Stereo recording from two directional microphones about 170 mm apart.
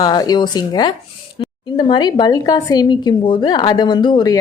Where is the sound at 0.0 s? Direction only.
20° left (ahead or behind).